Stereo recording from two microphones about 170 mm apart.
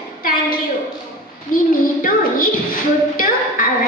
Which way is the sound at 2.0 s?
55° left (ahead or behind).